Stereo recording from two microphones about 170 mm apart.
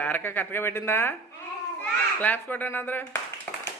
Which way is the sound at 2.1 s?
10° left (ahead or behind).